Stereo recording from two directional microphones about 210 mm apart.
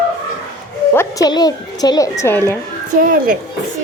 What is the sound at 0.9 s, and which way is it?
Speech, 15° left (ahead or behind).